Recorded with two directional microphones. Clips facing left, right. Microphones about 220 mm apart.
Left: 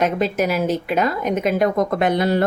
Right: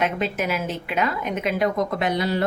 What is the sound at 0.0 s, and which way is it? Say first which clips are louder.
Speech: left 5 dB; 40° left (ahead or behind).